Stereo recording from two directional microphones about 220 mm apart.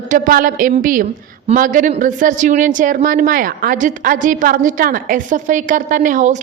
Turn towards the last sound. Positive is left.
turn(degrees=-35)  # may be behind; listen again after turning